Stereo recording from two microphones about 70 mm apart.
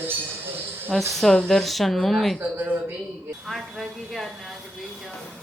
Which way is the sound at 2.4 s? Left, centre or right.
Right.